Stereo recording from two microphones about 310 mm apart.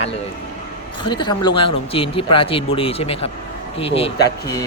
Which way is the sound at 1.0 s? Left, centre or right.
Centre.